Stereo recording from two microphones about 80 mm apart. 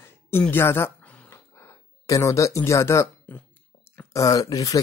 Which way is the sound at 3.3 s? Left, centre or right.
Centre.